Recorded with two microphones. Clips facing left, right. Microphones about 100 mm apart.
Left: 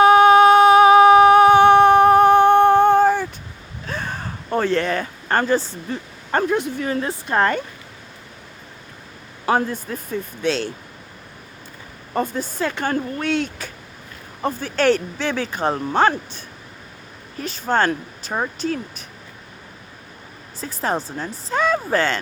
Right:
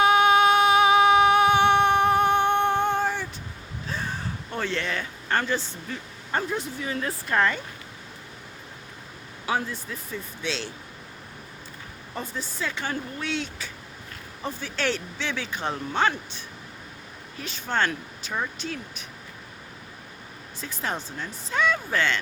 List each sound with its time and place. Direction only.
0.0 s a sound: 45° left (ahead or behind)
3.8 s a sound: 65° left (ahead or behind); by 6.0 s 40° left (ahead or behind)
6.3 s speech: 60° left (ahead or behind)
7.3 s speech: 45° left (ahead or behind)
9.5 s speech: 50° left (ahead or behind)
12.1 s speech: 50° left (ahead or behind)
20.6 s speech: 35° left (ahead or behind)